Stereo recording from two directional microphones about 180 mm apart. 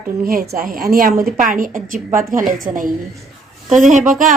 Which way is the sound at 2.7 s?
10° right (ahead or behind).